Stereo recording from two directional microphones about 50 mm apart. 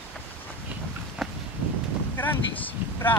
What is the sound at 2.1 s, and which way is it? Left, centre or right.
Speech, left.